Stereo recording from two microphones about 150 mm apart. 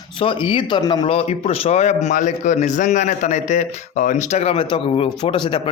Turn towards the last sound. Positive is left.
turn(degrees=35)  # may be behind; listen again after turning